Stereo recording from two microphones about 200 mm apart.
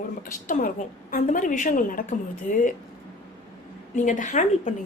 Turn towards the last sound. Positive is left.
turn(degrees=40)  # may be behind; listen again after turning